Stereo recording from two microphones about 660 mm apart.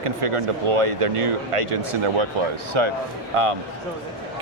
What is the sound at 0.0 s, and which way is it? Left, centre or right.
Speech, right.